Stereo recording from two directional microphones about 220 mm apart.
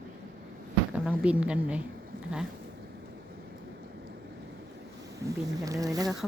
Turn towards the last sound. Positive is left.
turn(degrees=-15)  # may be behind; listen again after turning